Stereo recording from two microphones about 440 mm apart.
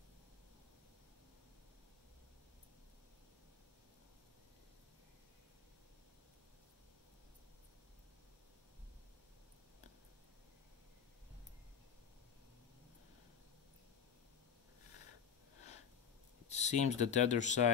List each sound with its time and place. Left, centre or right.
16.4 s speech: centre